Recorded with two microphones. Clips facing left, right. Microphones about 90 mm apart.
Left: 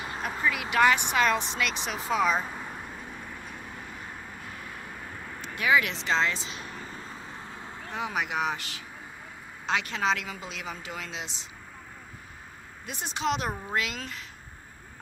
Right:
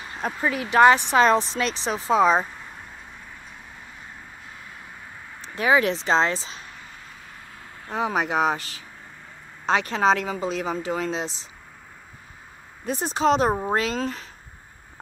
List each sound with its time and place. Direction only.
0.2 s speech: 35° right (ahead or behind)
5.4 s speech: 35° right (ahead or behind)
6.7 s vehicle: 35° left (ahead or behind)
7.9 s speech: 35° right (ahead or behind)
12.8 s speech: 35° right (ahead or behind)